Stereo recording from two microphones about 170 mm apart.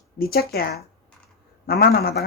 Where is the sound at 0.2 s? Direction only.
65° left (ahead or behind).